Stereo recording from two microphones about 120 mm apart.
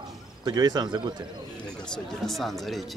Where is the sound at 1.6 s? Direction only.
5° left (ahead or behind).